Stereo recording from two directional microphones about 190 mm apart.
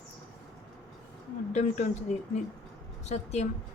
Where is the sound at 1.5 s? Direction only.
40° left (ahead or behind).